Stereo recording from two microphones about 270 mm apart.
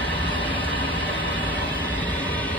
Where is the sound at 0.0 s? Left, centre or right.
Centre.